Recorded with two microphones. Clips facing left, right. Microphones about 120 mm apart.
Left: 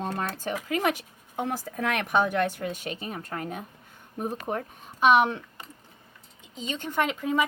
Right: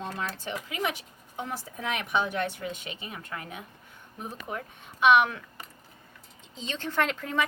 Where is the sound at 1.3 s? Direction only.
60° left (ahead or behind); by 5.4 s 30° left (ahead or behind).